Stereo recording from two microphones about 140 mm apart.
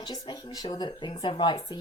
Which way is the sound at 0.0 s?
30° left (ahead or behind).